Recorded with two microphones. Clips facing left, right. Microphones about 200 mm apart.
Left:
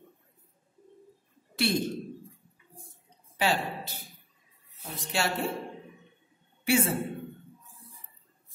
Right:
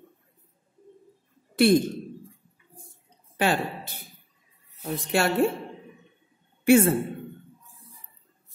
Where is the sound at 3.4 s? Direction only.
55° right (ahead or behind).